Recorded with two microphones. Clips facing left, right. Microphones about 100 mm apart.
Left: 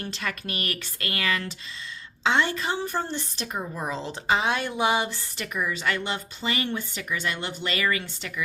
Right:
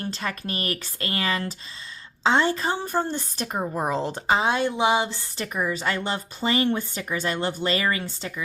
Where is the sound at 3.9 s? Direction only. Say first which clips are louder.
Right 6 dB; 50° right (ahead or behind).